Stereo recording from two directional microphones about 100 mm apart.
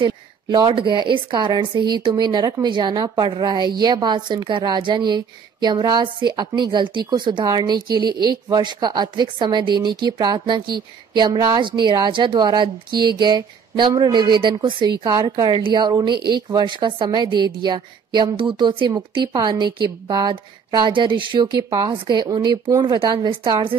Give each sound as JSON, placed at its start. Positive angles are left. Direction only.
{"t": 0.0, "sound": "a woman's voice", "side_deg": -50}